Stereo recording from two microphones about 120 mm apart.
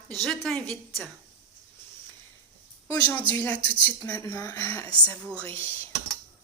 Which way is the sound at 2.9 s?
10° left (ahead or behind).